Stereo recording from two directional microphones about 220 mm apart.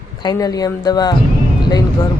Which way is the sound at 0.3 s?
15° left (ahead or behind).